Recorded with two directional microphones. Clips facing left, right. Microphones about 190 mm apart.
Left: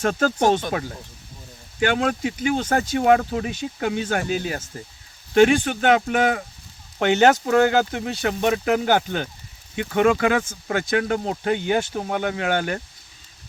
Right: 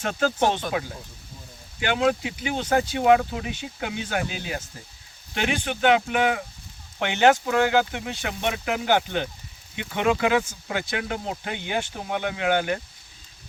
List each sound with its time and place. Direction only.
0.0 s speech: 45° left (ahead or behind)